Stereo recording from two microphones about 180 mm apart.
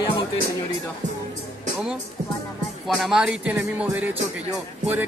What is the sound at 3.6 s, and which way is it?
Speech, 10° right (ahead or behind).